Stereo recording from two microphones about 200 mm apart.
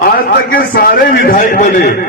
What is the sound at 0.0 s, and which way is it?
A man's voice, 45° left (ahead or behind).